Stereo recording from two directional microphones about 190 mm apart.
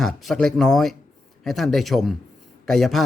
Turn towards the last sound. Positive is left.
turn(degrees=0)  # may be behind; listen again after turning